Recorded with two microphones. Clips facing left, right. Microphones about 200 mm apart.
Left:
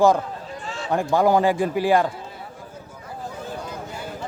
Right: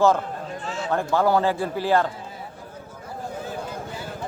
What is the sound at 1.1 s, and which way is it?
Speech, 15° left (ahead or behind).